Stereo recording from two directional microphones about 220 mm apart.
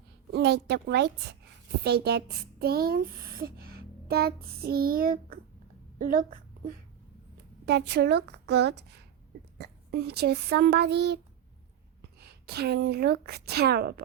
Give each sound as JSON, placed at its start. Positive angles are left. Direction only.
{"t": 0.3, "sound": "a woman's voice", "side_deg": -50}
{"t": 7.6, "sound": "speech", "side_deg": -50}
{"t": 12.2, "sound": "speech", "side_deg": -45}